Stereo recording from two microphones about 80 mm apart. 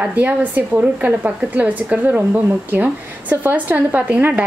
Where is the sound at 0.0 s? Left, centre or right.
Centre.